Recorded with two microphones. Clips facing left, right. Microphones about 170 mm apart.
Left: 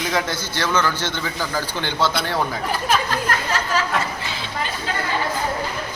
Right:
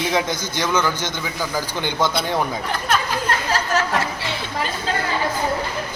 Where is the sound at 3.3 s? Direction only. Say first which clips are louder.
Right 1 dB; 30° right (ahead or behind).